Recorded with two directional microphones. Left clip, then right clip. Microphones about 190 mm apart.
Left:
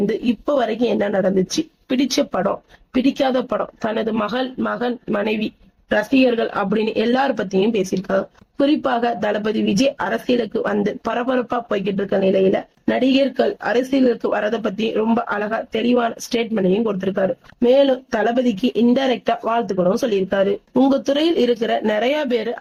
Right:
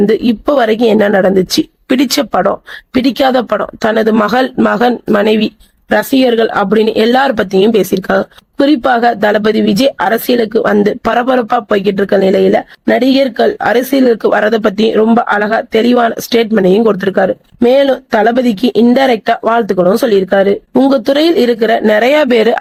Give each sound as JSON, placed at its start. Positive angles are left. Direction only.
{"t": 0.0, "sound": "speech", "side_deg": -45}